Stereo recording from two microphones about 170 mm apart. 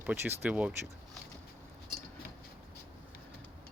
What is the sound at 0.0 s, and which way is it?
Speech, 10° right (ahead or behind).